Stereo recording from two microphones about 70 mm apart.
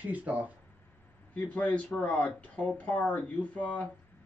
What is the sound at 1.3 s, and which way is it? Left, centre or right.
Speech, left.